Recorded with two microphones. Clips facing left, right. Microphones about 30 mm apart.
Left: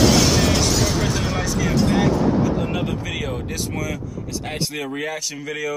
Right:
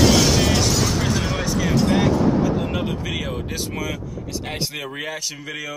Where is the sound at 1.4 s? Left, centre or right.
Centre.